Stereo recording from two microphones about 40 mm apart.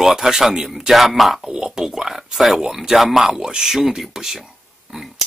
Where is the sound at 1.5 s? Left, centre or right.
Centre.